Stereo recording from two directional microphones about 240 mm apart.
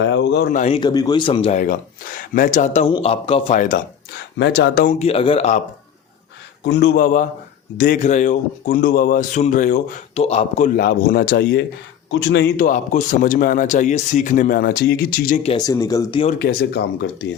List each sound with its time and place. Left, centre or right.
0.0 s speech: left
0.8 s speech: centre; by 3.8 s left
4.4 s speech: left
4.9 s speech: left
6.7 s speech: left
15.4 s speech: centre
16.4 s speech: left